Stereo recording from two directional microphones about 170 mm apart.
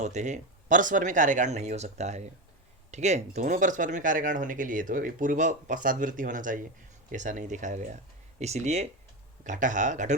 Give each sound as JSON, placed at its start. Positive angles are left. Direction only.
{"t": 0.0, "sound": "speech", "side_deg": -45}